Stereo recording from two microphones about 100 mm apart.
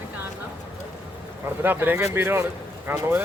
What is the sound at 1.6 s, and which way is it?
Speech, 20° right (ahead or behind).